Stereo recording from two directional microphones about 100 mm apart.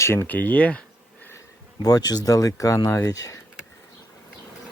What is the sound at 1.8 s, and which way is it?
Speech, 40° left (ahead or behind).